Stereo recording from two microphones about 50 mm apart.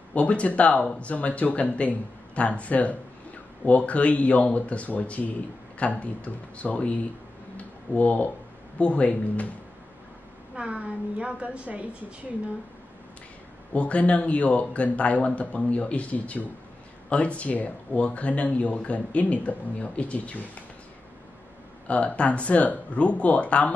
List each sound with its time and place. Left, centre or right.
0.1 s speech: left
7.5 s tick-tock: left
8.7 s speech: left
10.5 s a woman's voice: right
13.7 s speech: left
21.8 s speech: left